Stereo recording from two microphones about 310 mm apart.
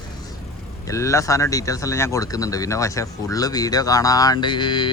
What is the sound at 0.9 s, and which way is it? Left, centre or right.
Speech, centre.